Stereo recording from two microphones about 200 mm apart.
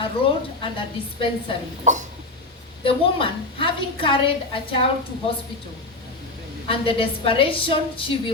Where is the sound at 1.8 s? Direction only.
40° right (ahead or behind).